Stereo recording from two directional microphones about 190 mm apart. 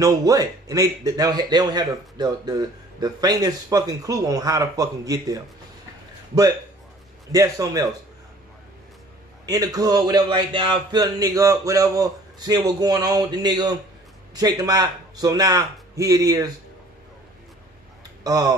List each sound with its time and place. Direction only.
0.0 s a man's voice: 20° right (ahead or behind)
7.3 s a man's voice: 20° right (ahead or behind)
9.5 s a man's voice: 20° right (ahead or behind)
18.2 s speech: 20° right (ahead or behind)